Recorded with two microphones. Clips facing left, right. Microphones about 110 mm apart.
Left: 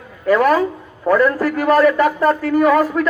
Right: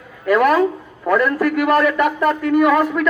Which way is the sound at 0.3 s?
30° left (ahead or behind).